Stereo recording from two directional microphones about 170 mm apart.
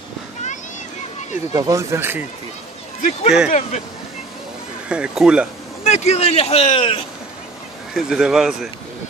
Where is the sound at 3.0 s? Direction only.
40° left (ahead or behind).